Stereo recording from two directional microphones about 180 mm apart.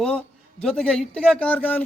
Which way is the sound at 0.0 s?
5° left (ahead or behind).